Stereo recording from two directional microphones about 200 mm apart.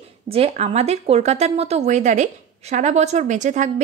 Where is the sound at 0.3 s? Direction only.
30° right (ahead or behind).